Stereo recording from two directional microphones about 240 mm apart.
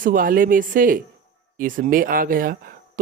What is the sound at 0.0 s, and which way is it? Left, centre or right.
Speech, right.